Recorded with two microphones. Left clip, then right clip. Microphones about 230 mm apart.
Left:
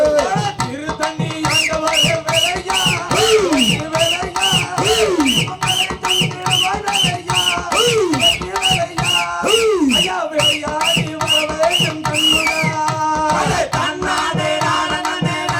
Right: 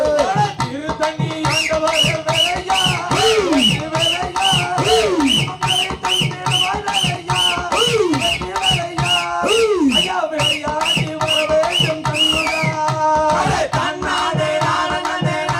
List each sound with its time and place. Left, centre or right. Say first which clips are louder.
0.0 s music: left 1 dB; left